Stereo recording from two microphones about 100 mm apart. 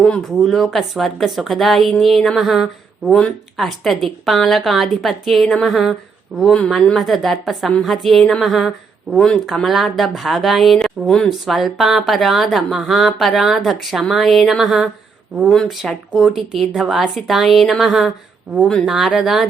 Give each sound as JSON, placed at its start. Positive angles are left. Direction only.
{"t": 0.0, "sound": "speech", "side_deg": 5}
{"t": 3.2, "sound": "speech", "side_deg": 10}